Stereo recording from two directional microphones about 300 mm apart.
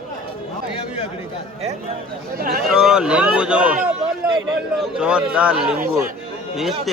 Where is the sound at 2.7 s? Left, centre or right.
Centre.